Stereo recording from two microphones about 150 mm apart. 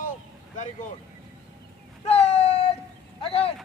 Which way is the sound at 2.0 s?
45° left (ahead or behind).